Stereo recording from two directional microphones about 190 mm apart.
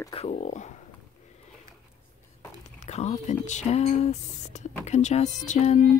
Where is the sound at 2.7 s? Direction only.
35° left (ahead or behind).